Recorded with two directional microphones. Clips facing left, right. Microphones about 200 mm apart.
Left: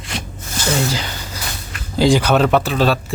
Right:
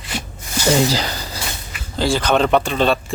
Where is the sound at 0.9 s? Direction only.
35° right (ahead or behind).